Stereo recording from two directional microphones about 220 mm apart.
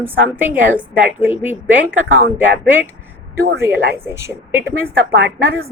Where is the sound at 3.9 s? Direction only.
10° right (ahead or behind).